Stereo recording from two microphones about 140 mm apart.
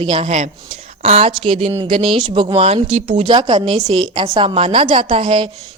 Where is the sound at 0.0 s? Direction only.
40° right (ahead or behind).